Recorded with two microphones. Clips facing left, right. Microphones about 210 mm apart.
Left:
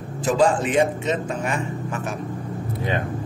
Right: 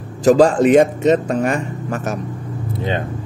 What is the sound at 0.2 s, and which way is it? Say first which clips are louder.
A man's voice: right 8 dB; 40° right (ahead or behind).